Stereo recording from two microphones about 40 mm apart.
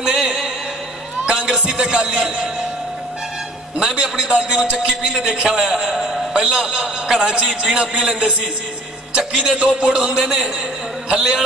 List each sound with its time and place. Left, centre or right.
0.0 s music: centre
1.2 s a man's voice: centre
3.9 s a man's voice: right